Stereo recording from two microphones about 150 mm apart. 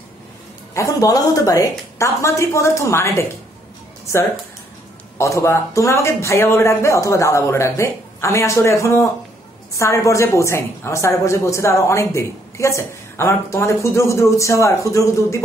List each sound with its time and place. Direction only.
0.7 s a woman's voice: 20° left (ahead or behind)
5.1 s a woman's voice: 20° left (ahead or behind)